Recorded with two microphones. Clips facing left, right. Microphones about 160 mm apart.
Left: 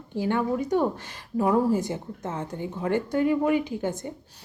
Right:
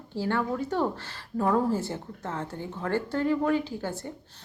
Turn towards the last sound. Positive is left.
turn(degrees=15)  # may be behind; listen again after turning